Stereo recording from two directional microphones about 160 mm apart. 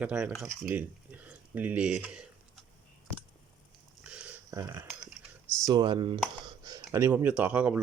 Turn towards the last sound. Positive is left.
turn(degrees=-10)  # may be behind; listen again after turning